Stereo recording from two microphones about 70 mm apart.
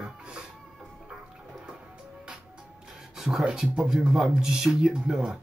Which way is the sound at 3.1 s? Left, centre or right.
Centre.